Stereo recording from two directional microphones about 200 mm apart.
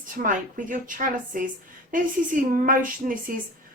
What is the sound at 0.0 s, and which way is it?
A woman's voice, 40° right (ahead or behind).